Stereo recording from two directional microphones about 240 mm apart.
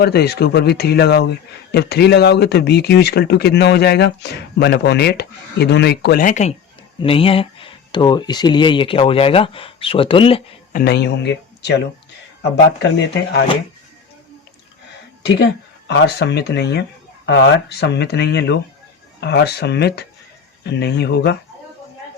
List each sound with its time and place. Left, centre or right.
0.0 s speech: left
10.8 s speech: left
15.9 s speech: left